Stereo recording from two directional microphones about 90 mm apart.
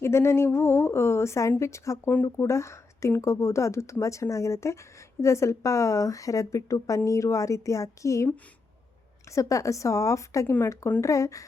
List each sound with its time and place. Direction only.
0.0 s a woman's voice: 30° left (ahead or behind)
9.3 s a woman's voice: 40° left (ahead or behind)
10.5 s speech: 25° left (ahead or behind)
11.0 s a woman's voice: 35° left (ahead or behind)